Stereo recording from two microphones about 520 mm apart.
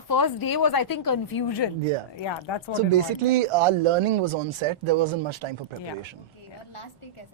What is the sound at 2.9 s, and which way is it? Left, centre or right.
Speech, right.